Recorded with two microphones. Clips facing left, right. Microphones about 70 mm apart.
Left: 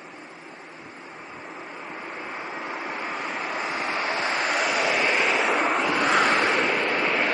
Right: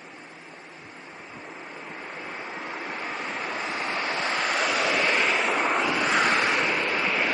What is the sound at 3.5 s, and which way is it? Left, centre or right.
Vehicle, centre.